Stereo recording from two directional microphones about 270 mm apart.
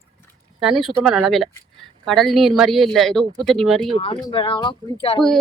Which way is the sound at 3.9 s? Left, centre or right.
Left.